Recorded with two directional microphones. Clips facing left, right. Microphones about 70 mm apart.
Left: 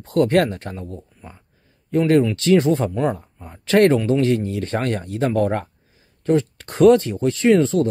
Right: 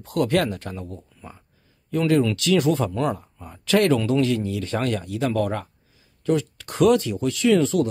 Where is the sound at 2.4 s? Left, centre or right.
Left.